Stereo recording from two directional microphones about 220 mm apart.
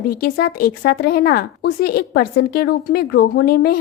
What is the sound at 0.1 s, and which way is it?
Speech, 45° left (ahead or behind).